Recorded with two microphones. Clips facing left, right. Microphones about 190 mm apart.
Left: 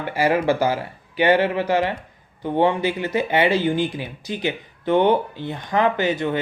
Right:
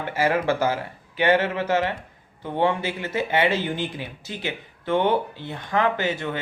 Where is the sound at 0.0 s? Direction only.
15° left (ahead or behind).